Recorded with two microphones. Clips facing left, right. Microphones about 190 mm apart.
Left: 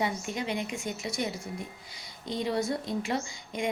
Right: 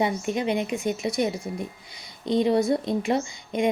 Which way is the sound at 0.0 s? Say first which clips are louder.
Right 7 dB; 20° right (ahead or behind).